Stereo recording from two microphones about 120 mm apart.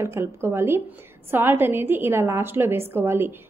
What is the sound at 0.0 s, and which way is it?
A woman's voice, 20° right (ahead or behind).